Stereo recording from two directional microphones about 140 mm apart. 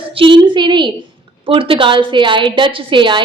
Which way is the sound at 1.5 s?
40° right (ahead or behind).